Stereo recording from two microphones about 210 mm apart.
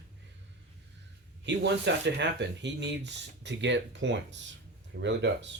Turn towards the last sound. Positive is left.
turn(degrees=-60)  # may be behind; listen again after turning